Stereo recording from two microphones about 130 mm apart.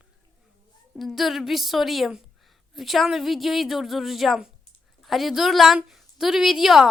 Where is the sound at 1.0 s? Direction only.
Centre (ahead or behind).